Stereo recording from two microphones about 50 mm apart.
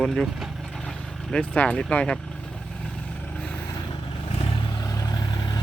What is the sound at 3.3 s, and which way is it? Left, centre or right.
Vehicle, left.